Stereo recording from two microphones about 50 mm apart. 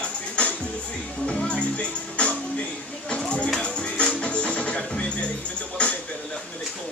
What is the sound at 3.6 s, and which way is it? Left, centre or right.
Music, left.